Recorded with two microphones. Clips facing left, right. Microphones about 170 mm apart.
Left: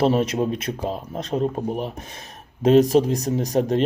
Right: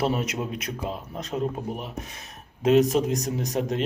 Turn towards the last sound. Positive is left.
turn(degrees=30)  # may be behind; listen again after turning